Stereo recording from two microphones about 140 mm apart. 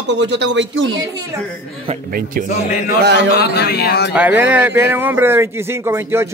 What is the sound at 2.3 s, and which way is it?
Speech, 90° right.